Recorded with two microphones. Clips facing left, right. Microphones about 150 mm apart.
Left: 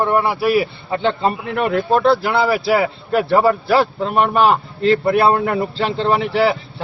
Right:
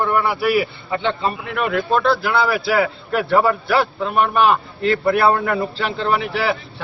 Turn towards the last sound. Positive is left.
turn(degrees=25)  # may be behind; listen again after turning